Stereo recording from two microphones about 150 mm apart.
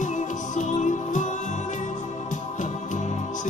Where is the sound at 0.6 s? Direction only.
55° left (ahead or behind).